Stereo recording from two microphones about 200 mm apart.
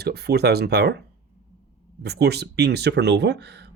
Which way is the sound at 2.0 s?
55° right (ahead or behind).